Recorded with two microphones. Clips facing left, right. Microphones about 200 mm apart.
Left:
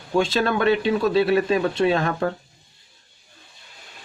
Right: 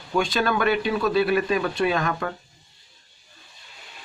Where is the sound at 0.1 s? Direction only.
25° left (ahead or behind).